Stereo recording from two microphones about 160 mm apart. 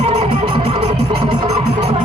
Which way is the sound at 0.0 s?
35° right (ahead or behind).